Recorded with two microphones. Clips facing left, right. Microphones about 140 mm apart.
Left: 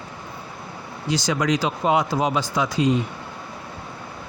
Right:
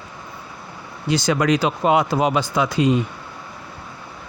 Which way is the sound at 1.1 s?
60° right (ahead or behind).